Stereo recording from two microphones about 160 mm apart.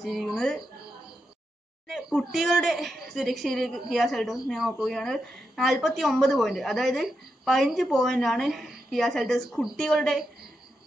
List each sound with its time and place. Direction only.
0.0 s a woman's voice: centre (ahead or behind)
1.9 s a woman's voice: centre (ahead or behind)